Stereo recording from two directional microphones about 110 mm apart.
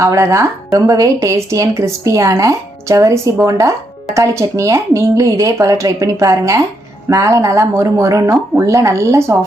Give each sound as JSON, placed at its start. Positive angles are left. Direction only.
{"t": 0.0, "sound": "speech", "side_deg": -30}